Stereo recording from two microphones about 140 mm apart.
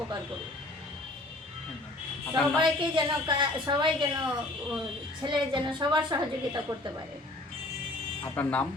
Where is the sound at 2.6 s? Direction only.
35° right (ahead or behind).